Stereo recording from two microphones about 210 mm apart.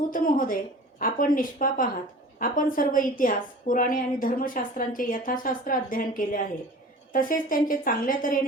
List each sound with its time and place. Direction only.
0.0 s a woman's voice: 40° left (ahead or behind)